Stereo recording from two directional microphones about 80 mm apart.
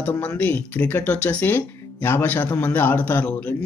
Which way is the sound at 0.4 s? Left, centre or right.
Centre.